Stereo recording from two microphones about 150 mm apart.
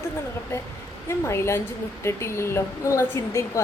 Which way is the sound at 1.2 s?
20° left (ahead or behind).